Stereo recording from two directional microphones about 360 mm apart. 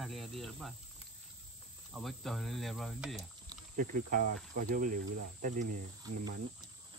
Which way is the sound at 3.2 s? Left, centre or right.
Right.